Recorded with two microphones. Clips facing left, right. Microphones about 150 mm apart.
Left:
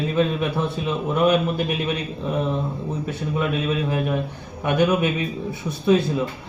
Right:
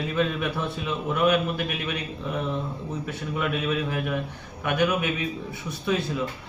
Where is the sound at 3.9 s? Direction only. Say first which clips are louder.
Left 5 dB; 30° left (ahead or behind).